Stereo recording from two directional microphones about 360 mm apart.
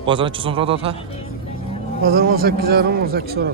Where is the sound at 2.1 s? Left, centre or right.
Right.